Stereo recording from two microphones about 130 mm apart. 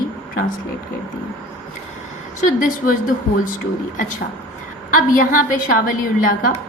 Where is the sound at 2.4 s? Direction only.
90° left.